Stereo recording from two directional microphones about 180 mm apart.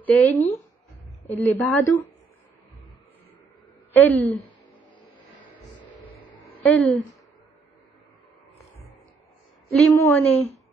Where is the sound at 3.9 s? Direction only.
10° left (ahead or behind).